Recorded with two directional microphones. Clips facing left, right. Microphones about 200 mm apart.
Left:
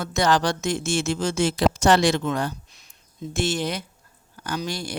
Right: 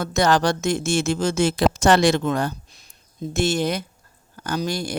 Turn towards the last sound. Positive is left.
turn(degrees=-45)  # may be behind; listen again after turning